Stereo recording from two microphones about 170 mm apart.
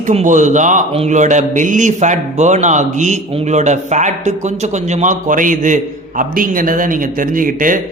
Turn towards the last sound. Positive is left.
turn(degrees=-50)  # may be behind; listen again after turning